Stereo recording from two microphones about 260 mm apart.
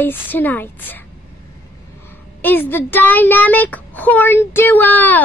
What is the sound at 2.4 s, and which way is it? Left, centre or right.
A child's voice, centre.